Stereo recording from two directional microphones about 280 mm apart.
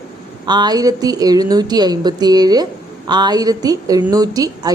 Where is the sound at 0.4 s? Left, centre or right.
Centre.